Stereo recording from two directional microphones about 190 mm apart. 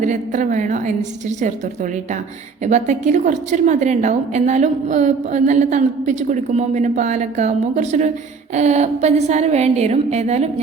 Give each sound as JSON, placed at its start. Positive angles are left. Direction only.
{"t": 0.0, "sound": "a woman's voice", "side_deg": -40}